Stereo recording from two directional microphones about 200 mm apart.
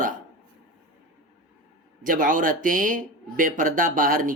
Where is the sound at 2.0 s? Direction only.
40° right (ahead or behind).